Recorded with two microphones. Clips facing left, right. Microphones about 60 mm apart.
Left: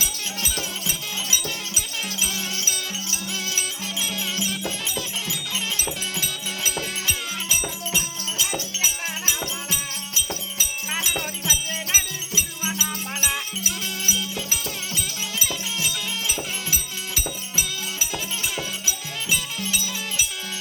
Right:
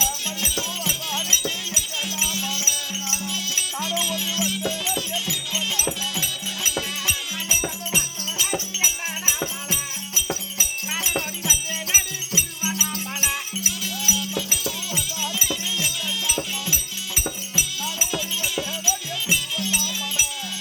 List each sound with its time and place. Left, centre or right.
2.2 s music: left
7.5 s music: centre
8.8 s music: centre
11.0 s music: centre
16.0 s music: left